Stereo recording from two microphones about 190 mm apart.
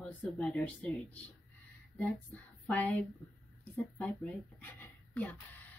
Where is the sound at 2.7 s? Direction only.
10° left (ahead or behind).